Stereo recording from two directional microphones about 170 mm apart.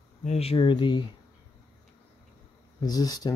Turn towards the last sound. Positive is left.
turn(degrees=20)  # may be behind; listen again after turning